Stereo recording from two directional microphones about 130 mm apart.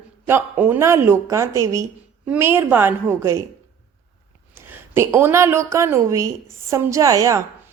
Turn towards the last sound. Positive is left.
turn(degrees=-25)  # may be behind; listen again after turning